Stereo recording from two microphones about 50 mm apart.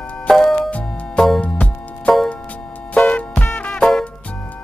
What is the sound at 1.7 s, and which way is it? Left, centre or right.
Music, left.